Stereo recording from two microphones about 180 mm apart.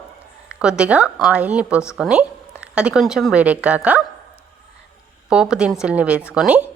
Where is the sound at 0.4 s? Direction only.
5° right (ahead or behind).